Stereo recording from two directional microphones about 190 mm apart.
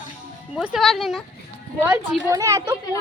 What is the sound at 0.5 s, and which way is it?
Speech, 5° right (ahead or behind).